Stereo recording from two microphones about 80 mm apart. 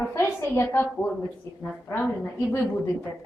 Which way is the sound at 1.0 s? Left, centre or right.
Centre.